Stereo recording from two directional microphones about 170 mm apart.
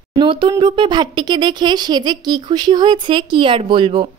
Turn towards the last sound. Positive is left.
turn(degrees=-30)  # may be behind; listen again after turning